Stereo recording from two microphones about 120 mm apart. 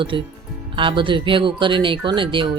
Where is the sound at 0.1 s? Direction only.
45° right (ahead or behind).